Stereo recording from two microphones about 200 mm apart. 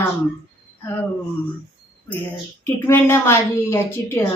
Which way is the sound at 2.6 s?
10° left (ahead or behind).